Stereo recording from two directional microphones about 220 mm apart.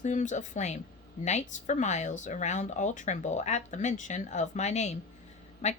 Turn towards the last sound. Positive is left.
turn(degrees=30)  # may be behind; listen again after turning